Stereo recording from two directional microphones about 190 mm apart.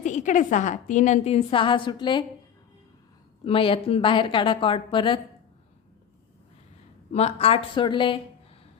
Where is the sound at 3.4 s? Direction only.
30° left (ahead or behind).